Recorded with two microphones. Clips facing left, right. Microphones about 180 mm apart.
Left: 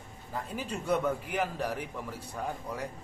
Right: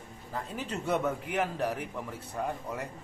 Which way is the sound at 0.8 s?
Centre (ahead or behind).